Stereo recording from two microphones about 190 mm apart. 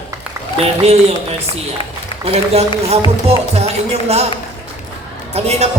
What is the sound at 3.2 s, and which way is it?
Speech, 35° right (ahead or behind).